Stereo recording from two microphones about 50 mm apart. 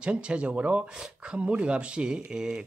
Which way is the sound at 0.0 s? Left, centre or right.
Right.